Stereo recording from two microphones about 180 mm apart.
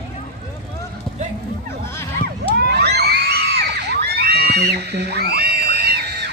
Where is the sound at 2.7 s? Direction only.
65° right (ahead or behind).